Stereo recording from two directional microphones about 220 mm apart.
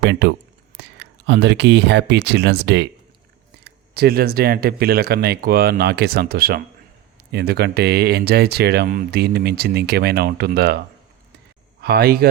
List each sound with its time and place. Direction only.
0.0 s speech: 50° right (ahead or behind)